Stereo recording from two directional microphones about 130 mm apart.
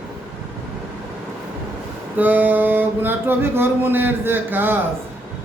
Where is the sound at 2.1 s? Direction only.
15° right (ahead or behind).